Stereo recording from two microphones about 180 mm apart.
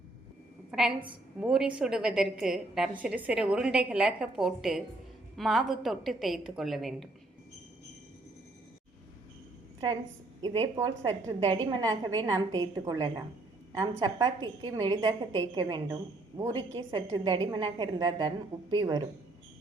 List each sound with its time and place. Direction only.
0.7 s a woman's voice: 5° right (ahead or behind)
10.4 s a woman's voice: 30° right (ahead or behind)